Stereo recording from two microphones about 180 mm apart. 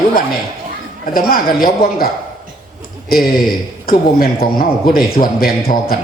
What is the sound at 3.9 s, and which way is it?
A man's voice, 55° left (ahead or behind).